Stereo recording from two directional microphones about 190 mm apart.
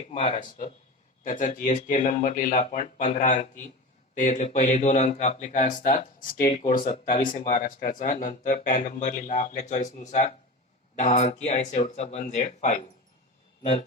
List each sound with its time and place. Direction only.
0.3 s a man's voice: 40° left (ahead or behind)